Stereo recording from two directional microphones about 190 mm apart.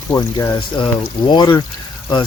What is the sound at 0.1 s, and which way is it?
Speech, 15° left (ahead or behind).